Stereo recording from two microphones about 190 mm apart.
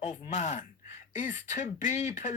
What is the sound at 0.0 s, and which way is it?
Speech, 35° left (ahead or behind).